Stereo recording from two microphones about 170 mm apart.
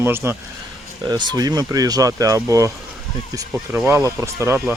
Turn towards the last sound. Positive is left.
turn(degrees=-15)  # may be behind; listen again after turning